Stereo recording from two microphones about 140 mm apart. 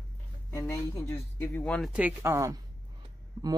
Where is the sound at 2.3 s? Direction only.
25° right (ahead or behind).